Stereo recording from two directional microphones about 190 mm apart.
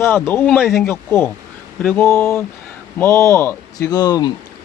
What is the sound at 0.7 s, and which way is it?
Speech, 15° left (ahead or behind).